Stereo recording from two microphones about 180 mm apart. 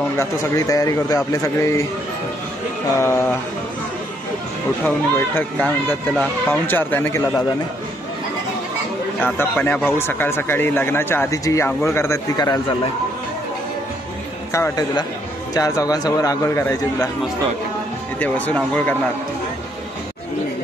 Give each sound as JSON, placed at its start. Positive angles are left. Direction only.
{"t": 0.2, "sound": "speech", "side_deg": 15}
{"t": 3.0, "sound": "speech", "side_deg": 15}
{"t": 4.8, "sound": "speech", "side_deg": 10}
{"t": 9.2, "sound": "speech", "side_deg": 10}
{"t": 14.5, "sound": "a man's voice", "side_deg": 20}
{"t": 18.2, "sound": "speech", "side_deg": 10}